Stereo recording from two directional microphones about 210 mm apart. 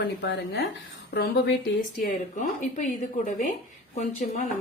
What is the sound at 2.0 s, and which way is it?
Speech, 35° left (ahead or behind).